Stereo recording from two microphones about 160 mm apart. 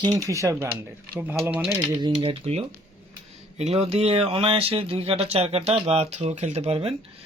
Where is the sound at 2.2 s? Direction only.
40° right (ahead or behind).